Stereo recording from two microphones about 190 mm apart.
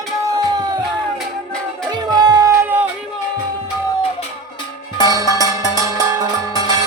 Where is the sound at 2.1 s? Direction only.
20° right (ahead or behind).